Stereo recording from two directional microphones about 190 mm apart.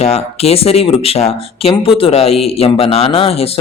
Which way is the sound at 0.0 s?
35° left (ahead or behind).